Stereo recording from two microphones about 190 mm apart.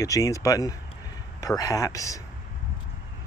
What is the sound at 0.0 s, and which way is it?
Speech, 15° left (ahead or behind).